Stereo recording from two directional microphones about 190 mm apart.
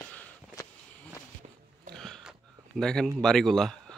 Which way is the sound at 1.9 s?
Centre (ahead or behind).